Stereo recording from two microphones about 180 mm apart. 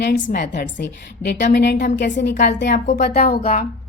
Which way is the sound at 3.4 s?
35° left (ahead or behind).